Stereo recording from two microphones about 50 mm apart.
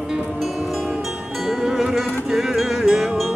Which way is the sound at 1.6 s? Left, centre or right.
Centre.